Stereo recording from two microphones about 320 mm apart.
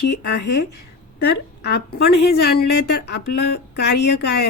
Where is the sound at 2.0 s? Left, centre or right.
Left.